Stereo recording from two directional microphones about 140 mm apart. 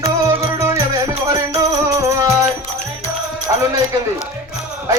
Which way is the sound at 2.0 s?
20° right (ahead or behind).